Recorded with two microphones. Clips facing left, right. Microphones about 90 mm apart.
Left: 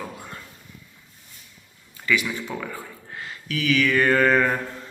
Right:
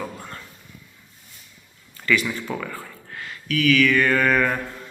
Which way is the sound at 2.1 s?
10° left (ahead or behind).